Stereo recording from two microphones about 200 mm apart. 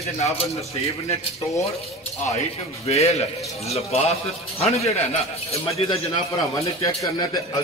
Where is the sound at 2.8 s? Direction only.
30° left (ahead or behind).